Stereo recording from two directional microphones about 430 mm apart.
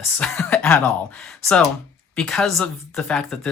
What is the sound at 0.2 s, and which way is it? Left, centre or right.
Speech, centre.